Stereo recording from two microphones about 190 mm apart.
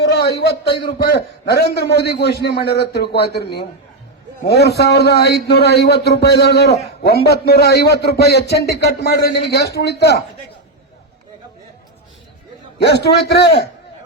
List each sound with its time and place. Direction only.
0.0 s a sound: 60° left (ahead or behind)
0.9 s a man's voice: 60° left (ahead or behind)
12.8 s a man's voice: 60° left (ahead or behind)